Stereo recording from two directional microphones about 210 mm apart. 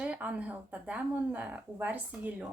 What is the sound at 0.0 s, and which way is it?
Speech, 5° right (ahead or behind).